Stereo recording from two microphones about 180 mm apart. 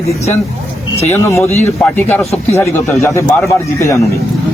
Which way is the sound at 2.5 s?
15° left (ahead or behind).